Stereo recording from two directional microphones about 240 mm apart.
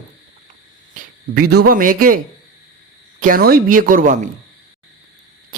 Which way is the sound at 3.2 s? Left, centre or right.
Right.